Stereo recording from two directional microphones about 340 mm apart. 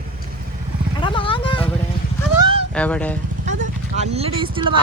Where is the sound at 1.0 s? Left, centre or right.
Centre.